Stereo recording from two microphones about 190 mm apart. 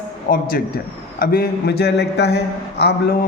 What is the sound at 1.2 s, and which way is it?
Speech, 50° left (ahead or behind).